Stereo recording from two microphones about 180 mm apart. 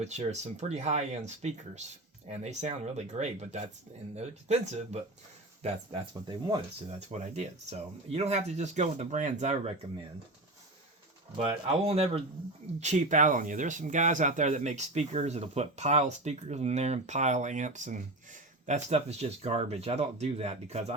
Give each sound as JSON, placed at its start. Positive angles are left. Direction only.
{"t": 0.0, "sound": "speech", "side_deg": -40}
{"t": 11.3, "sound": "speech", "side_deg": -35}